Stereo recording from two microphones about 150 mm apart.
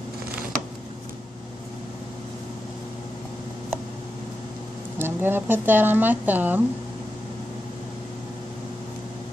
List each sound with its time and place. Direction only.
4.9 s speech: 15° right (ahead or behind)